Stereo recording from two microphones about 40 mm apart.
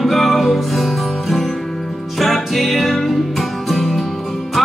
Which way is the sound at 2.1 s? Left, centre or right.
Centre.